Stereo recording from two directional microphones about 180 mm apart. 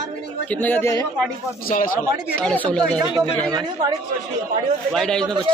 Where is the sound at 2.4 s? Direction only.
5° left (ahead or behind).